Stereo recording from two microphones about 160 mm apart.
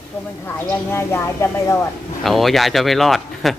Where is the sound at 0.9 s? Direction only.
15° left (ahead or behind).